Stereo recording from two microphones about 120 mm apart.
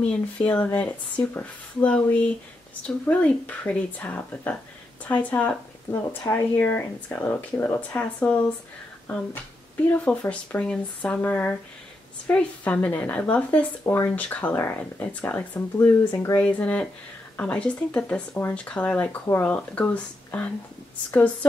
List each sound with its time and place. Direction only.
0.0 s speech: 10° left (ahead or behind)
16.1 s speech: 30° left (ahead or behind)
16.3 s speech: 10° left (ahead or behind)